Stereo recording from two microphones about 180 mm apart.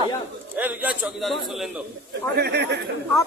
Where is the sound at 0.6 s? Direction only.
10° right (ahead or behind).